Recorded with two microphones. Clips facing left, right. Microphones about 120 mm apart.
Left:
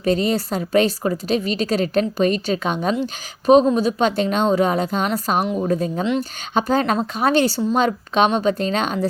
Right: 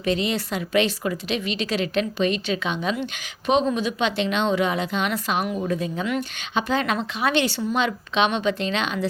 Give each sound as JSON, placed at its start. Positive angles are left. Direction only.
{"t": 0.0, "sound": "speech", "side_deg": 40}